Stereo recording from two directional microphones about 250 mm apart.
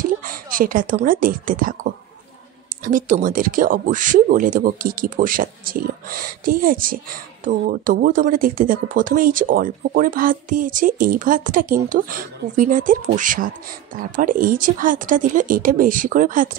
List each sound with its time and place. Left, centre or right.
0.0 s a woman's voice: right
2.8 s speech: right